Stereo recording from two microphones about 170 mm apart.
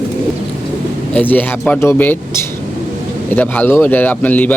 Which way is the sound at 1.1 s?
10° left (ahead or behind).